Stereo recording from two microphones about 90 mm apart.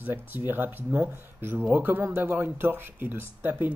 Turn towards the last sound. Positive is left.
turn(degrees=-25)  # may be behind; listen again after turning